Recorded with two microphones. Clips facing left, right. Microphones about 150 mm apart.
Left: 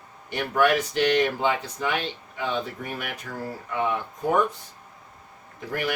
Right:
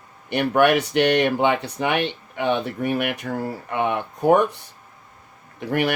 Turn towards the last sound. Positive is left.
turn(degrees=-70)  # may be behind; listen again after turning